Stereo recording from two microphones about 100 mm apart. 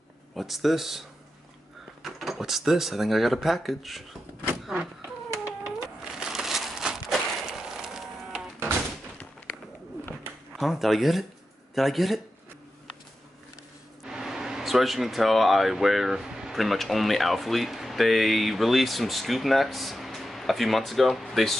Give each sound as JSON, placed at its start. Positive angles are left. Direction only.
{"t": 0.4, "sound": "speech", "side_deg": 0}
{"t": 2.0, "sound": "speech", "side_deg": 0}
{"t": 5.0, "sound": "chicken", "side_deg": -20}
{"t": 6.1, "sound": "a sound", "side_deg": -5}
{"t": 10.6, "sound": "speech", "side_deg": 0}
{"t": 14.0, "sound": "speech", "side_deg": -5}